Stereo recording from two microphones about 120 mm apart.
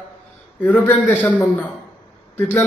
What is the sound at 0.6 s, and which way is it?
Speech, 15° left (ahead or behind).